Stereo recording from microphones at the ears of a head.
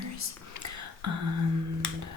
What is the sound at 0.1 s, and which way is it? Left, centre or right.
Whispering, left.